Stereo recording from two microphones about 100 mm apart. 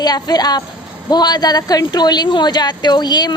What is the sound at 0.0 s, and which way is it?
A woman's voice, 40° left (ahead or behind).